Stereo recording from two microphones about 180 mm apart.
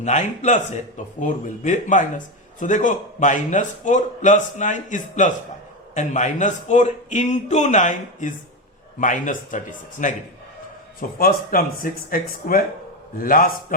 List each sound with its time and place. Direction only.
0.0 s a man's voice: 40° left (ahead or behind)
11.2 s speech: 55° left (ahead or behind)